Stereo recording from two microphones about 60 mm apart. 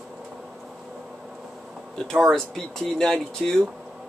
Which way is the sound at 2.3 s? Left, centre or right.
Centre.